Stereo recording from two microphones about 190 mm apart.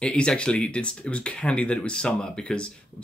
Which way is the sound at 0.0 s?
5° left (ahead or behind).